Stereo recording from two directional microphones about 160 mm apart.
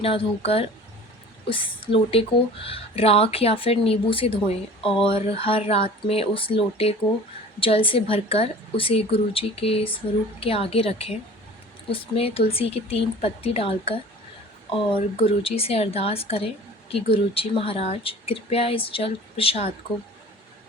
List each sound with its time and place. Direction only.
0.0 s speech: 35° left (ahead or behind)